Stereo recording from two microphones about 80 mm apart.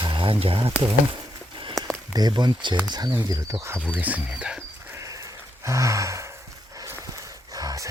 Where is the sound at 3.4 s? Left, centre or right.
Right.